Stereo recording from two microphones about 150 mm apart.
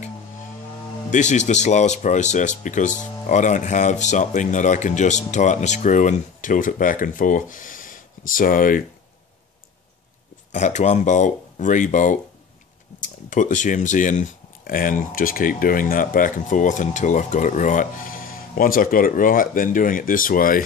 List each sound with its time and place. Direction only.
1.1 s speech: 50° left (ahead or behind)
10.5 s speech: 50° left (ahead or behind); by 20.6 s 70° left (ahead or behind)